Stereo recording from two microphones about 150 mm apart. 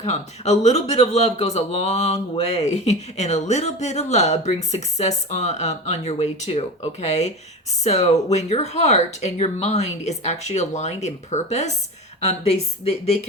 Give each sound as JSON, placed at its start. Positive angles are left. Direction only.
{"t": 0.0, "sound": "a man's voice", "side_deg": 45}